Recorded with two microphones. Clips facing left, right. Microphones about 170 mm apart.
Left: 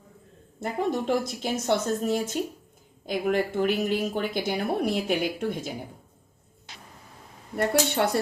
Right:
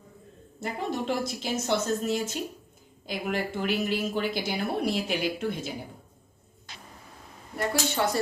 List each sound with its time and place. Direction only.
0.6 s a woman's voice: 50° left (ahead or behind)
7.5 s speech: 60° left (ahead or behind)